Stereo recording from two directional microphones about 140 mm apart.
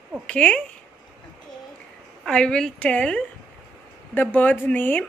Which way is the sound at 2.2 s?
5° left (ahead or behind).